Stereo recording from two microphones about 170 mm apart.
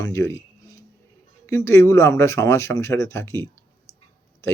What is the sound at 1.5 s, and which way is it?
Speech, 15° left (ahead or behind).